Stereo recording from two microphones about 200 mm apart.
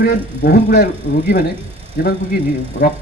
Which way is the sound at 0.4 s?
50° left (ahead or behind).